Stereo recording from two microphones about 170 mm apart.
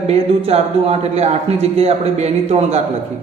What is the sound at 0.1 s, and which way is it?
Music, 35° right (ahead or behind).